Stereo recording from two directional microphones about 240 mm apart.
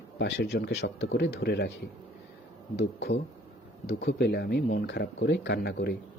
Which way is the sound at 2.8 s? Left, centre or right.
Left.